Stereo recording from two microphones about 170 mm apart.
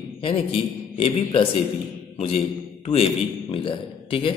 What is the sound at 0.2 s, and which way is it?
A man's voice, 30° left (ahead or behind).